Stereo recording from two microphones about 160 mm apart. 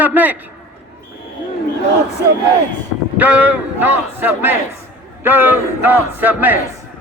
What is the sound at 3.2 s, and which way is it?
A man's voice, 10° right (ahead or behind).